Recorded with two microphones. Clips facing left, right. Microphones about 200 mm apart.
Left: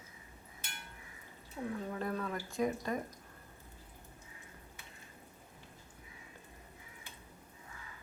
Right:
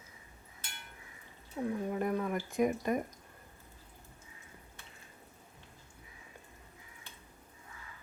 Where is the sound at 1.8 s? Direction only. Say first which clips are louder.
Right 5 dB; 15° right (ahead or behind).